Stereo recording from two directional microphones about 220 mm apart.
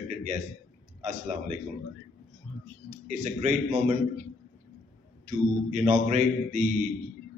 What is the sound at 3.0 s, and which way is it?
Speech, 35° right (ahead or behind).